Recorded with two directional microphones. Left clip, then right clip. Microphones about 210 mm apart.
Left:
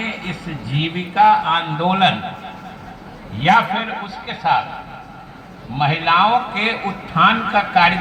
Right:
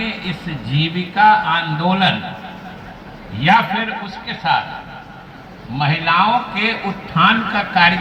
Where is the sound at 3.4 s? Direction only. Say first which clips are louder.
Right 1 dB; 45° left (ahead or behind).